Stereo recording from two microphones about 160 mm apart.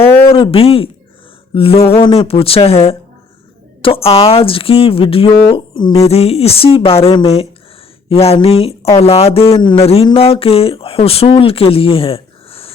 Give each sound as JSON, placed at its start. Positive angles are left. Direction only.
{"t": 0.3, "sound": "speech", "side_deg": 35}